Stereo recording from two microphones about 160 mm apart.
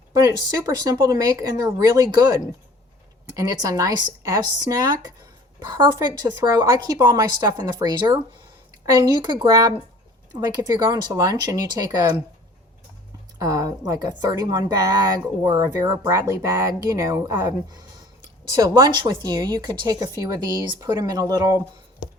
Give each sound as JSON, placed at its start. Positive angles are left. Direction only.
{"t": 0.1, "sound": "a woman's voice", "side_deg": -20}
{"t": 13.4, "sound": "a woman's voice", "side_deg": -20}